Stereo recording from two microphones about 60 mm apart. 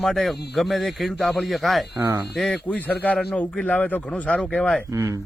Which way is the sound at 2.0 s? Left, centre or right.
Right.